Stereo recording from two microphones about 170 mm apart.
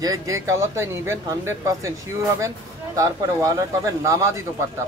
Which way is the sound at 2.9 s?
20° right (ahead or behind).